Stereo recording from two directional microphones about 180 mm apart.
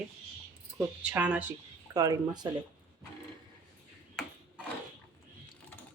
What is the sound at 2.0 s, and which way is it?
Speech, 20° right (ahead or behind).